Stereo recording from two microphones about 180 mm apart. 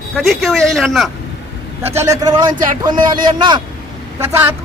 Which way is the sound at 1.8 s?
15° right (ahead or behind).